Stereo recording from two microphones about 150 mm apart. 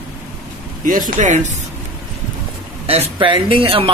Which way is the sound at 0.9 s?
60° right (ahead or behind).